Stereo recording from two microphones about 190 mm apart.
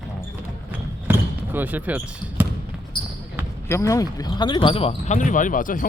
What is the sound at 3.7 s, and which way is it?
Speech, 15° left (ahead or behind).